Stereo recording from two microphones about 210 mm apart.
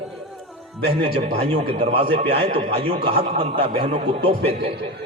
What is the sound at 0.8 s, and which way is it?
A man's voice, 30° right (ahead or behind).